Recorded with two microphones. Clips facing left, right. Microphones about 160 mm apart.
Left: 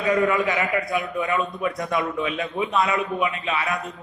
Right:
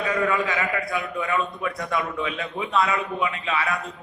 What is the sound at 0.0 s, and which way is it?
A man's voice, 20° left (ahead or behind).